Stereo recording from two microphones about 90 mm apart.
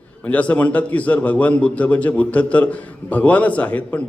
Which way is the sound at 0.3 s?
15° left (ahead or behind).